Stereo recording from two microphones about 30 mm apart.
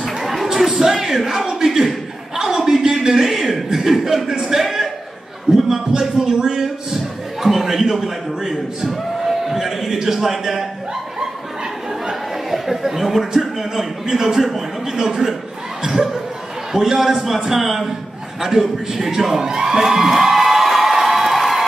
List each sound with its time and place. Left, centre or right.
0.0 s a sound: centre
0.7 s music: centre
1.7 s a man's voice: centre
2.4 s a sound: centre
3.0 s a man's voice: centre
5.5 s a man's voice: right
5.9 s a man's voice: centre
12.4 s a man's voice: centre
16.7 s a man's voice: centre
19.4 s a sound: centre